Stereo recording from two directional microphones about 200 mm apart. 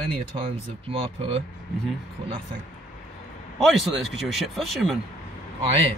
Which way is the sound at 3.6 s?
Centre (ahead or behind).